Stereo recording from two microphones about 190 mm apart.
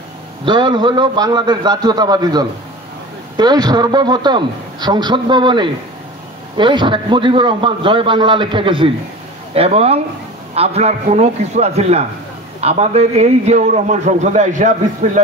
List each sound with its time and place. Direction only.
0.5 s a man's voice: 25° right (ahead or behind); by 15.0 s 40° right (ahead or behind)